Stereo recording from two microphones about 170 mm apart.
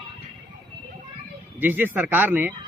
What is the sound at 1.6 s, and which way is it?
Speech, 10° right (ahead or behind).